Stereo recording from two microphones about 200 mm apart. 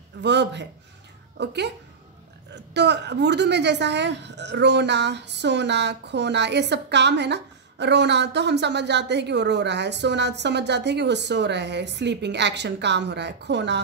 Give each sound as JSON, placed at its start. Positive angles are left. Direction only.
{"t": 0.2, "sound": "a woman's voice", "side_deg": -60}